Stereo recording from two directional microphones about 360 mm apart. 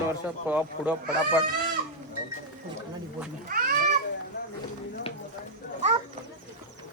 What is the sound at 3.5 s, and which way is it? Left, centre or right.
Cat, right.